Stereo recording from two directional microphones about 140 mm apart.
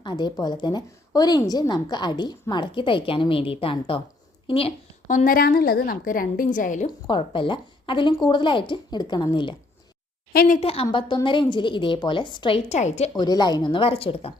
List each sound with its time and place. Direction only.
0.0 s a woman's voice: 30° left (ahead or behind)
5.0 s a woman's voice: 70° left (ahead or behind)
7.1 s a woman's voice: 40° left (ahead or behind)
10.3 s a woman's voice: 90° left
10.6 s a woman's voice: 45° left (ahead or behind)
10.8 s a woman's voice: 35° left (ahead or behind); by 13.1 s 55° left (ahead or behind)
13.1 s a woman's voice: 30° left (ahead or behind)